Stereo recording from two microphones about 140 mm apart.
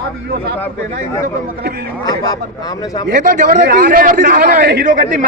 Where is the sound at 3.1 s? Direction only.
70° right (ahead or behind).